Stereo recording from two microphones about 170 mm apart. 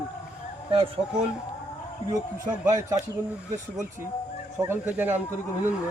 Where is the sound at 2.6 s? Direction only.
20° right (ahead or behind).